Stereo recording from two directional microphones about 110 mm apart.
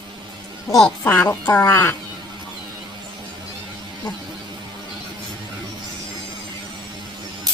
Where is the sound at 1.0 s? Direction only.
15° left (ahead or behind).